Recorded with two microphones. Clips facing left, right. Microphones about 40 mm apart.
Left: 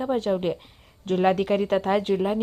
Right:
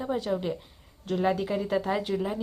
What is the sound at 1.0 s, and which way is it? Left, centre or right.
Speech, left.